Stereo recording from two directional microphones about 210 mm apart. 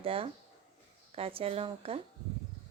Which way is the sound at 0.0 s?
25° right (ahead or behind).